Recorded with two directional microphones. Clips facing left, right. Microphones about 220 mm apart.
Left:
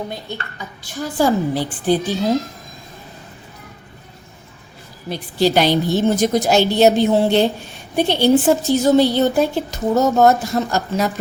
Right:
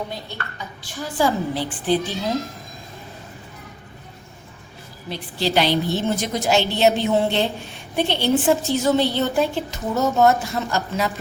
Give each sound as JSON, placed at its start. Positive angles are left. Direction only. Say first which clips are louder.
{"t": 0.9, "sound": "a woman's voice", "louder": "left 4 dB", "side_deg": 45}
{"t": 5.0, "sound": "a woman's voice", "louder": "left 7 dB", "side_deg": 45}